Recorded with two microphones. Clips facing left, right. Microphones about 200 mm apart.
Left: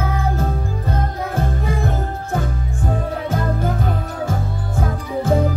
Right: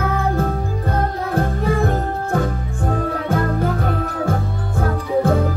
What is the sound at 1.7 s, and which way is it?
Music, 60° right (ahead or behind).